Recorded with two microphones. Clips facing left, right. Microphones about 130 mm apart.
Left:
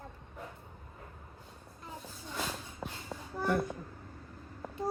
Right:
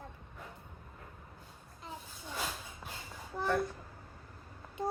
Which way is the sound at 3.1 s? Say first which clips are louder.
Left 6 dB; 55° left (ahead or behind).